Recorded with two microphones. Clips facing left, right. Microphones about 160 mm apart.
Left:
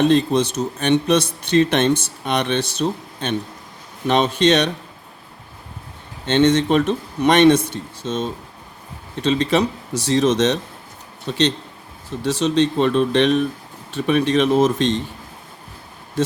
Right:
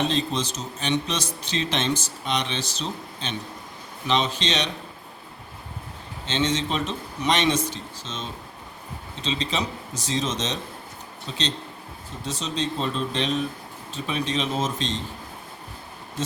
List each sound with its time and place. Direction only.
0.0 s a man's voice: 55° left (ahead or behind)
6.2 s a man's voice: 60° left (ahead or behind)